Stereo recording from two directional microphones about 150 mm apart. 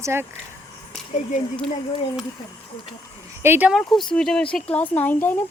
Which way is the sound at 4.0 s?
5° left (ahead or behind).